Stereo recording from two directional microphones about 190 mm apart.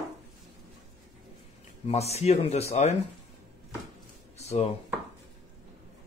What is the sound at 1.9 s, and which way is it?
Speech, 35° left (ahead or behind).